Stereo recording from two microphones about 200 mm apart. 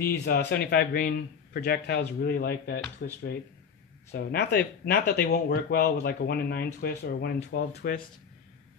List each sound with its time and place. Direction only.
0.0 s speech: 50° left (ahead or behind)